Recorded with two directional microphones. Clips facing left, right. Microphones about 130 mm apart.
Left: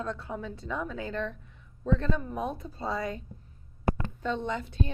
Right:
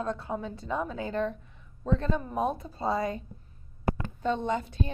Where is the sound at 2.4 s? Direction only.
40° right (ahead or behind).